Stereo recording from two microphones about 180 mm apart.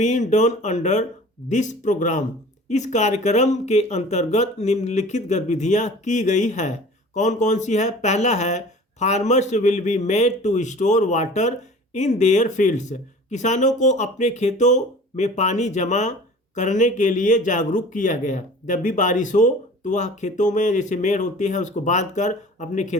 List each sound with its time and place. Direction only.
0.0 s speech: 40° left (ahead or behind)